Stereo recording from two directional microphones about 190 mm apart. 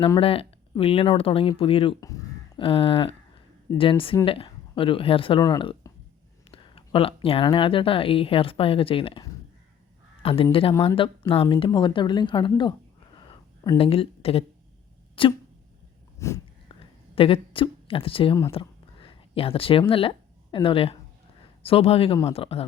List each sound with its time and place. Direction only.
0.0 s speech: 30° left (ahead or behind)
13.7 s speech: 30° left (ahead or behind)
15.2 s a sound: 30° left (ahead or behind)
16.1 s speech: 15° left (ahead or behind)
17.2 s a woman's voice: 30° left (ahead or behind)
18.5 s a sound: 30° left (ahead or behind)
19.9 s speech: 30° left (ahead or behind)